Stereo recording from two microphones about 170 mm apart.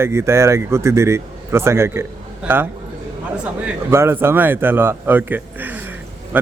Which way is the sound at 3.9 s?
15° right (ahead or behind).